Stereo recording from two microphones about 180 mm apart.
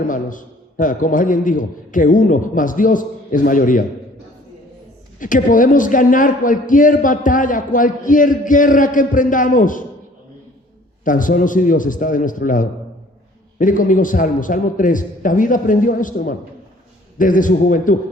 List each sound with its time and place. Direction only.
0.1 s a man's voice: 45° left (ahead or behind)
5.2 s a man's voice: 45° left (ahead or behind)
11.0 s a man's voice: 45° left (ahead or behind)